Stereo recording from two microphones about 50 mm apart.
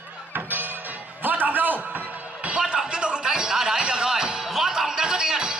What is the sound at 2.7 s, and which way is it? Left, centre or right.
Music, centre.